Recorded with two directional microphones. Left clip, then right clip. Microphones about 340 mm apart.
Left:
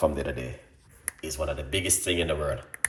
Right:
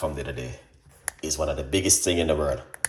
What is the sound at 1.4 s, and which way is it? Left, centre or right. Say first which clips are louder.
Speech: right 3 dB; centre.